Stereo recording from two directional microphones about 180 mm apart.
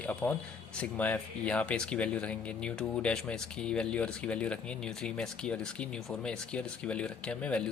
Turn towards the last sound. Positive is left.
turn(degrees=5)  # may be behind; listen again after turning